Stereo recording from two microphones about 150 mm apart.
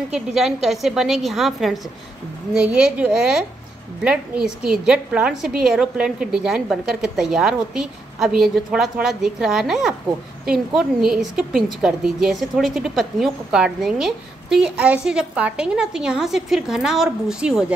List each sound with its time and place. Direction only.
0.1 s a woman's voice: centre (ahead or behind)